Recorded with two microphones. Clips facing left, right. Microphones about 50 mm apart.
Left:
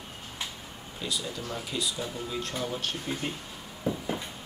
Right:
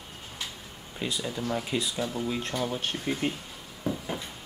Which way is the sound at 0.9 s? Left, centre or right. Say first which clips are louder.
Right 2 dB; right.